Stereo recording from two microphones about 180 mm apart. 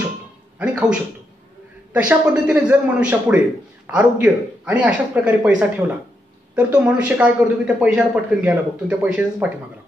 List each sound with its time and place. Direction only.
0.6 s a man's voice: 5° right (ahead or behind)
2.0 s a man's voice: 5° right (ahead or behind)